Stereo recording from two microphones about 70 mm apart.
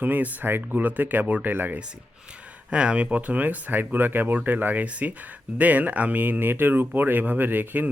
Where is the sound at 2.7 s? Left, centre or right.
Centre.